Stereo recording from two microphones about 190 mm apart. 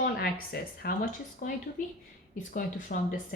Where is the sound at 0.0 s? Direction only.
50° left (ahead or behind).